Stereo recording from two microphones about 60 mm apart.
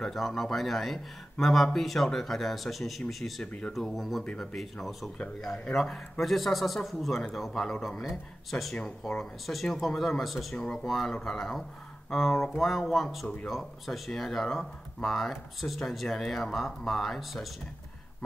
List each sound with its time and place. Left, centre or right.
0.0 s speech: centre
4.2 s speech: centre
4.6 s speech: centre
10.5 s speech: centre